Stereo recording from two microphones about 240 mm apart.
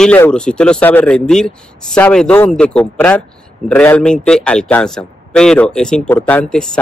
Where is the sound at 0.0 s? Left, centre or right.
Centre.